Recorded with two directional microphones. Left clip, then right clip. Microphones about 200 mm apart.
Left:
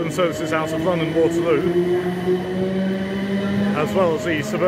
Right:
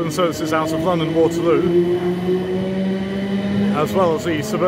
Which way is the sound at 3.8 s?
15° right (ahead or behind).